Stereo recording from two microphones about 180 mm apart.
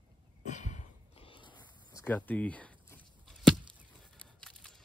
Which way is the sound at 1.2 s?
30° left (ahead or behind).